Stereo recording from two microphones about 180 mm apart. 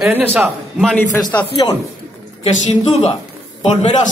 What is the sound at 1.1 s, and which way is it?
Speech, 15° left (ahead or behind).